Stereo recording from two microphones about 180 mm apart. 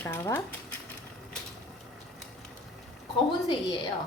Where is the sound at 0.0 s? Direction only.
15° left (ahead or behind).